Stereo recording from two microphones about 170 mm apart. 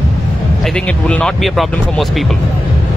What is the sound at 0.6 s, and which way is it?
A man's voice, 5° left (ahead or behind).